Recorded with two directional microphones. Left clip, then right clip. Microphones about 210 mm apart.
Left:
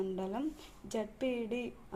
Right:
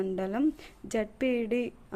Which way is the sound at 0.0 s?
30° right (ahead or behind).